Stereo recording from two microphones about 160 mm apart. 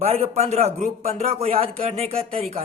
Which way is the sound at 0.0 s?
40° right (ahead or behind).